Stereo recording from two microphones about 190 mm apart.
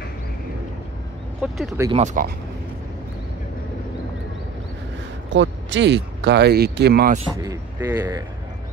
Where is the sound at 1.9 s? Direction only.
35° right (ahead or behind).